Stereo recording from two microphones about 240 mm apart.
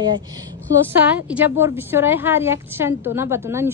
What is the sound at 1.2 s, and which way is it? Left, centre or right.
A woman's voice, centre.